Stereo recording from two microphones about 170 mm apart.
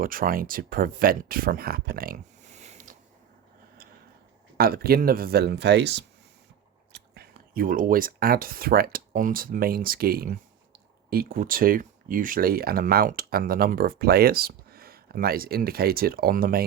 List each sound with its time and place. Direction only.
0.0 s speech: 55° right (ahead or behind)
4.5 s speech: 60° right (ahead or behind); by 6.1 s 85° right
6.9 s speech: 70° right (ahead or behind)